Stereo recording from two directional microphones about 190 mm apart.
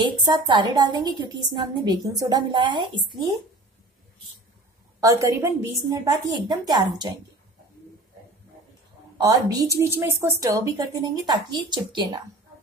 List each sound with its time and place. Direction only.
0.0 s a woman's voice: 25° right (ahead or behind)
5.0 s a woman's voice: 15° right (ahead or behind)
9.2 s a woman's voice: 20° right (ahead or behind)